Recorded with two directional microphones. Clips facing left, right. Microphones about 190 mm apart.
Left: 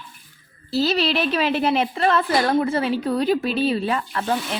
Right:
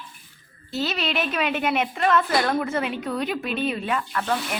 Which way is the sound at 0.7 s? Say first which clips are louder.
Left 6 dB; 35° left (ahead or behind).